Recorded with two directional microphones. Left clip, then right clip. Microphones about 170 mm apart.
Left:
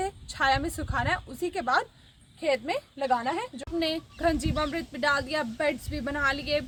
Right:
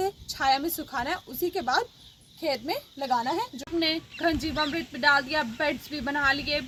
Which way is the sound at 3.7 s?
40° left (ahead or behind).